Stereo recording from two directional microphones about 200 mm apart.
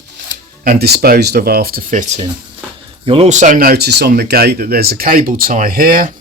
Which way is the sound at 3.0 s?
30° right (ahead or behind).